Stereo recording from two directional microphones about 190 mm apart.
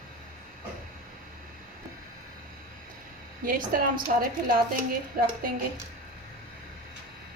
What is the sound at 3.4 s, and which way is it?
A woman's voice, 50° right (ahead or behind).